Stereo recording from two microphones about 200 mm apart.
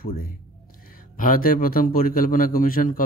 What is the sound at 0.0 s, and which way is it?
A man's voice, 45° left (ahead or behind).